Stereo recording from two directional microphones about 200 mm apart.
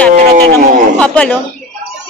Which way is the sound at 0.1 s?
35° right (ahead or behind).